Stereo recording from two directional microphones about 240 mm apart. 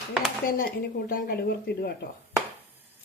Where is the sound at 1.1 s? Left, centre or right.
Left.